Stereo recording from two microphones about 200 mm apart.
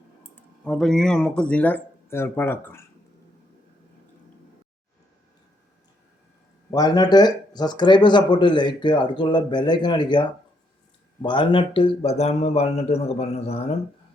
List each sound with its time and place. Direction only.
0.6 s speech: 5° left (ahead or behind)
6.7 s a man's voice: 20° left (ahead or behind)